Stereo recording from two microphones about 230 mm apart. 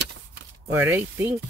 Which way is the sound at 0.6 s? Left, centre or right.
Centre.